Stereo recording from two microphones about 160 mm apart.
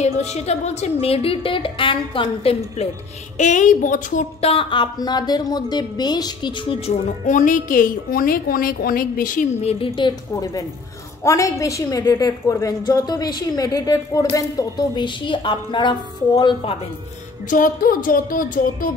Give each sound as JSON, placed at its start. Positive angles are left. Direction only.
{"t": 0.0, "sound": "a woman's voice", "side_deg": 45}
{"t": 2.2, "sound": "a woman's voice", "side_deg": 45}
{"t": 4.4, "sound": "a woman's voice", "side_deg": 35}
{"t": 7.2, "sound": "a woman's voice", "side_deg": 55}
{"t": 9.6, "sound": "a woman's voice", "side_deg": 40}
{"t": 17.5, "sound": "a woman's voice", "side_deg": 60}